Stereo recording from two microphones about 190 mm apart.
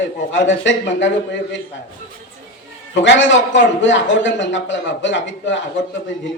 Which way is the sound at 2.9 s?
75° left (ahead or behind).